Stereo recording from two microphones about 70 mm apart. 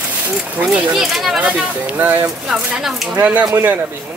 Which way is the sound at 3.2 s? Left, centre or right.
Right.